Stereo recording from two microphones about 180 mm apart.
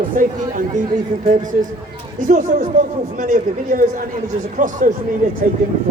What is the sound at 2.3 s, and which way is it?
A man's voice, 45° right (ahead or behind).